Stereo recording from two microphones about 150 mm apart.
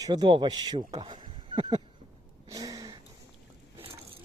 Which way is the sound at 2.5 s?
25° right (ahead or behind).